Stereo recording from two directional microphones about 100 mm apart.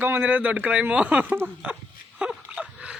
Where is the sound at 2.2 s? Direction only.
5° right (ahead or behind).